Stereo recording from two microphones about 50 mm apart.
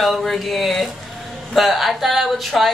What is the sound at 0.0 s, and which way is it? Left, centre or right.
A woman's voice, centre.